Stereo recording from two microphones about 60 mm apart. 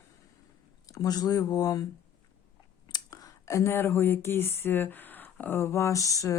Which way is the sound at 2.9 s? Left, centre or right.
Left.